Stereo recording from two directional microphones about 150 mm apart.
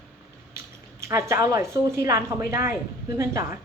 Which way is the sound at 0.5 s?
15° right (ahead or behind).